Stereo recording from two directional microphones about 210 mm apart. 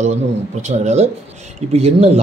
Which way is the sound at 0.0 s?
35° right (ahead or behind).